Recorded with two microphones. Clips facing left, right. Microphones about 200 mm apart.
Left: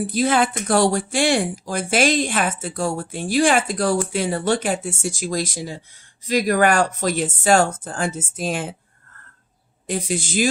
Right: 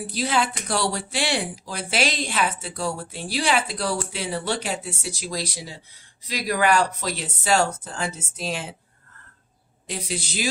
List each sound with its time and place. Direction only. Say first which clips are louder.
0.1 s speech: left 4 dB; 50° left (ahead or behind)
9.8 s speech: left 7 dB; 50° left (ahead or behind)